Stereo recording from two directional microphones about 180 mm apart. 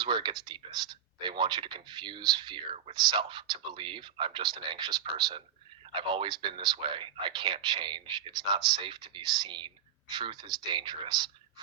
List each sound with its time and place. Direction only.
0.0 s speech: 25° right (ahead or behind)